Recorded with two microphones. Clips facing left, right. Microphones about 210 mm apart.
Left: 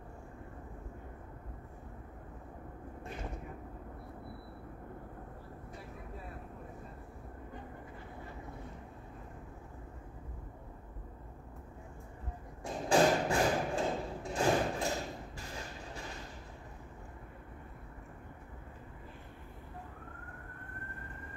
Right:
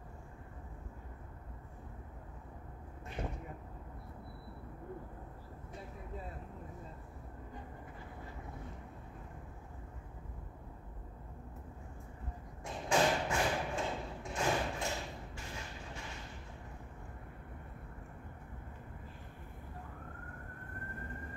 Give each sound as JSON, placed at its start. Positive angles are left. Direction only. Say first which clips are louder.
{"t": 12.6, "sound": "thump", "louder": "left 4 dB", "side_deg": 35}